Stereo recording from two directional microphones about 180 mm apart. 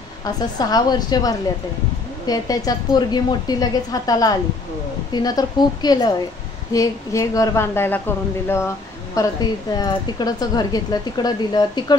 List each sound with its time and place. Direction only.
0.2 s a woman's voice: 20° left (ahead or behind)